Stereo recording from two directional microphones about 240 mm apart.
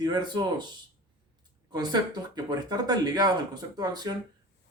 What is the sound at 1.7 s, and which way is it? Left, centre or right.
A man's voice, centre.